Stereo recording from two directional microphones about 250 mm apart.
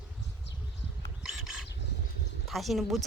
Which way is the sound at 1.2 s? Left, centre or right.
Centre.